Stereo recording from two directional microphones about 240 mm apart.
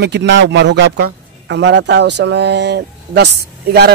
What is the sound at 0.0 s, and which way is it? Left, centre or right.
A man's voice, right.